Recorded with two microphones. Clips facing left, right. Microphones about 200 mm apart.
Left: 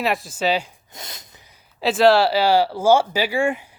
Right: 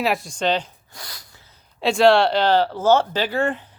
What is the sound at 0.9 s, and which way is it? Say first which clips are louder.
Snort: left 2 dB; 20° left (ahead or behind).